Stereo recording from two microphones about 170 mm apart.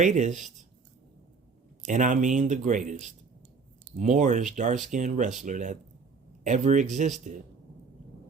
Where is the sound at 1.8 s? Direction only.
50° right (ahead or behind).